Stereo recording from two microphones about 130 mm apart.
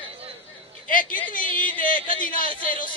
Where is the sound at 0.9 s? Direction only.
90° left.